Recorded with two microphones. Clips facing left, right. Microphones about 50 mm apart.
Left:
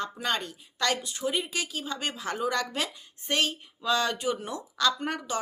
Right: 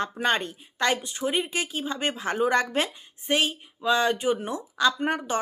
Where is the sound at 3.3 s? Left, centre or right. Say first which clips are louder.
Right 3 dB; centre.